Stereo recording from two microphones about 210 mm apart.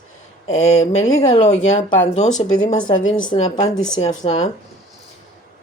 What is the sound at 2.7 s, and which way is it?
Speech, 20° left (ahead or behind).